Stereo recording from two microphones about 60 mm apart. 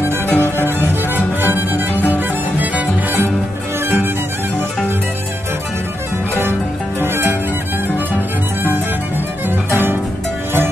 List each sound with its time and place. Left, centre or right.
0.3 s music: left
0.7 s music: right
7.0 s music: right
9.5 s music: right